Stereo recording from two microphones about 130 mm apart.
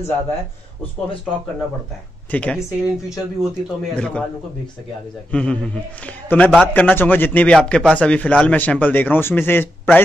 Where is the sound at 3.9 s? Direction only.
10° left (ahead or behind).